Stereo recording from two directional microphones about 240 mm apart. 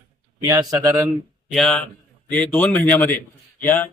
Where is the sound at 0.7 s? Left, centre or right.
Centre.